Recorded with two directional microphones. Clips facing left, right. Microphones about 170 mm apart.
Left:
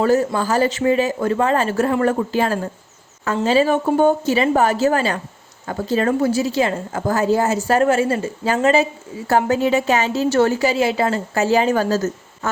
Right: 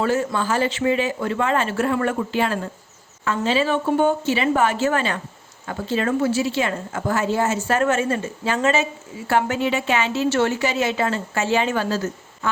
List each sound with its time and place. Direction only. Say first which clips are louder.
0.0 s a woman's voice: left 4 dB; 40° left (ahead or behind)